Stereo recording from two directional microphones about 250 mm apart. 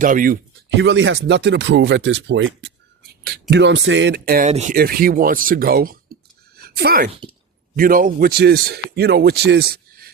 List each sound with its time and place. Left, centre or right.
0.0 s speech: right
0.7 s speech: right